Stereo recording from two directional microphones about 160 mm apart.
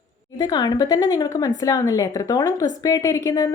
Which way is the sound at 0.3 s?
25° left (ahead or behind).